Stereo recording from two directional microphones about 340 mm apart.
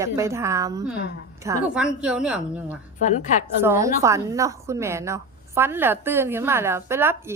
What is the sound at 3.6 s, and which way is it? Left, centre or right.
A woman's voice, centre.